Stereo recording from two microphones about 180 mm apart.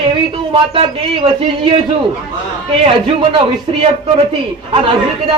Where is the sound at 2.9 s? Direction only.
25° right (ahead or behind).